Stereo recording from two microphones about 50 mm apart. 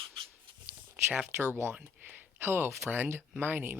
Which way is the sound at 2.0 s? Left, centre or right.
Right.